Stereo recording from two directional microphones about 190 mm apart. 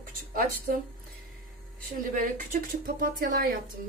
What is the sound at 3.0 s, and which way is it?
Speech, 50° right (ahead or behind).